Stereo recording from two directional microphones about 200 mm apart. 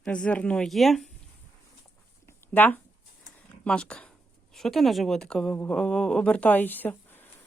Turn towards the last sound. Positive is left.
turn(degrees=10)  # may be behind; listen again after turning